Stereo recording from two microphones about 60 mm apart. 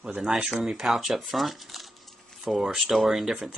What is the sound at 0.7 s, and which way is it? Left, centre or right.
Speech, centre.